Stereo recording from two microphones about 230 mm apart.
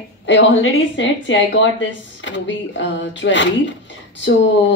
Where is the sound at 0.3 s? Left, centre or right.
Left.